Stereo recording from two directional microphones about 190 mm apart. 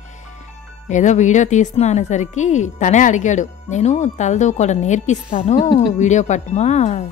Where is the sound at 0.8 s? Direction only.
40° left (ahead or behind).